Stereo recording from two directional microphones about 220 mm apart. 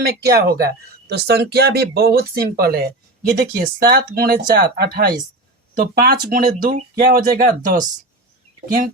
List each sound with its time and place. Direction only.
0.3 s speech: 45° right (ahead or behind)